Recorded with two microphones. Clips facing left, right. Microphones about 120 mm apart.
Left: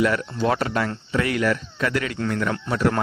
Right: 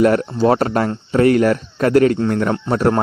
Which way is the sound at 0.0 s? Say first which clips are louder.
Right 7 dB; 40° right (ahead or behind).